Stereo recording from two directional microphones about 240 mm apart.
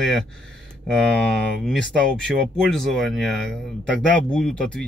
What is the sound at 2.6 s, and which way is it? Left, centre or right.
Speech, centre.